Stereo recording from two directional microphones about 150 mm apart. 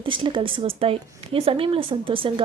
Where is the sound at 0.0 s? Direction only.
35° right (ahead or behind).